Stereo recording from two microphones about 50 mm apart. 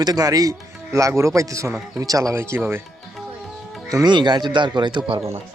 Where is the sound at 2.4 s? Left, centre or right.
Right.